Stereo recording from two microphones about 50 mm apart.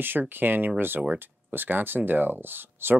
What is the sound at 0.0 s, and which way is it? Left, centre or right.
Speech, right.